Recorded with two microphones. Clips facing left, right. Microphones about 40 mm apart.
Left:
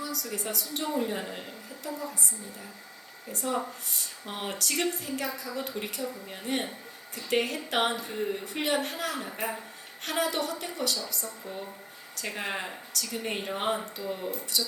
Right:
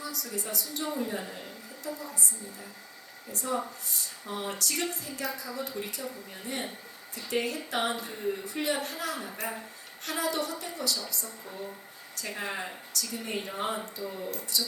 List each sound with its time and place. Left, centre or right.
0.0 s a woman's voice: left
3.4 s a woman's voice: left
12.2 s a woman's voice: left